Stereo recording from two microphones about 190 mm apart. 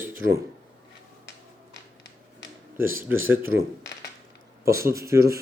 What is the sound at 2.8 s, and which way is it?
Speech, 10° right (ahead or behind).